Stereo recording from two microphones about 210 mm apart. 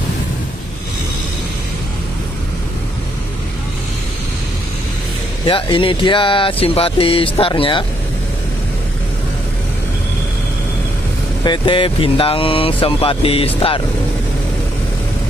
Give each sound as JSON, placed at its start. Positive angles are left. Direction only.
{"t": 5.5, "sound": "speech", "side_deg": 25}
{"t": 11.4, "sound": "speech", "side_deg": 20}